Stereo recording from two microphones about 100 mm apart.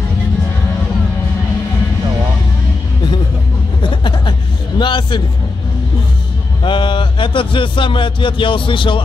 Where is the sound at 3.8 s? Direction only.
55° left (ahead or behind).